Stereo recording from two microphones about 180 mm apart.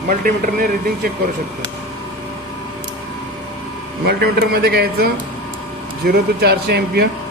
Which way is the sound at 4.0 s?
65° right (ahead or behind).